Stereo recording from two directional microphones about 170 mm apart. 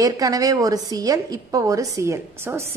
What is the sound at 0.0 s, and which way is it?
A woman's voice, 20° right (ahead or behind).